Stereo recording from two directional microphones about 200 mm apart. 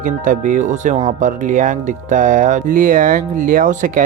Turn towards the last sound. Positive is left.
turn(degrees=-40)  # may be behind; listen again after turning